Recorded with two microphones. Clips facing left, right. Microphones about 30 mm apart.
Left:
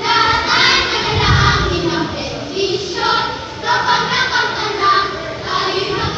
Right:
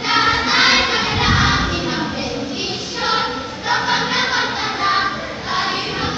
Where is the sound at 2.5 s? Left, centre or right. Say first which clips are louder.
Left 6 dB; left.